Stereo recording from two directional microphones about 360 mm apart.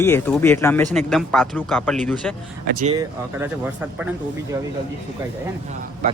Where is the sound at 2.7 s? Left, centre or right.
Right.